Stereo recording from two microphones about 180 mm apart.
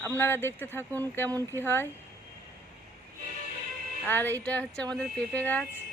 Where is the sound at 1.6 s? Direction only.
10° left (ahead or behind).